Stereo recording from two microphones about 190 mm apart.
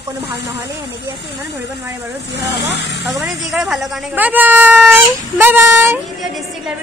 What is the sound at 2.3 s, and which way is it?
Speech, 60° left (ahead or behind).